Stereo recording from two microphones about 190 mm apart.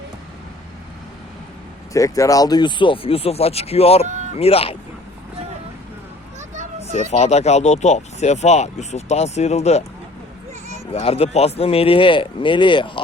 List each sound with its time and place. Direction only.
1.9 s speech: 15° left (ahead or behind)
6.9 s speech: 35° left (ahead or behind)
10.9 s speech: 30° left (ahead or behind)